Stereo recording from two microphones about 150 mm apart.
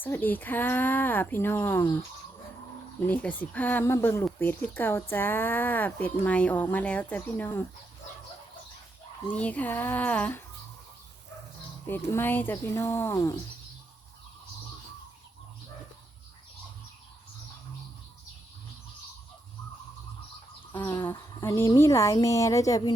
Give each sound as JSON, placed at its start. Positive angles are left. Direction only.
{"t": 0.0, "sound": "speech", "side_deg": 10}
{"t": 3.1, "sound": "speech", "side_deg": 10}
{"t": 9.2, "sound": "speech", "side_deg": 10}
{"t": 11.9, "sound": "speech", "side_deg": 15}
{"t": 20.7, "sound": "a woman's voice", "side_deg": 20}